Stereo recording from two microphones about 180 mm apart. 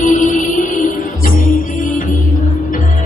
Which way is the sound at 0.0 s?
45° left (ahead or behind).